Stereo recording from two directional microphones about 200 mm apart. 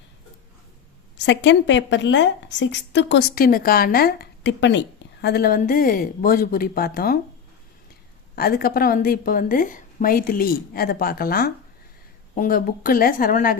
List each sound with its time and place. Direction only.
1.1 s speech: 60° left (ahead or behind)
8.4 s speech: 50° left (ahead or behind)